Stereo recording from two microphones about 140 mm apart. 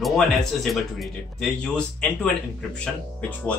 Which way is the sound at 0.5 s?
Centre (ahead or behind).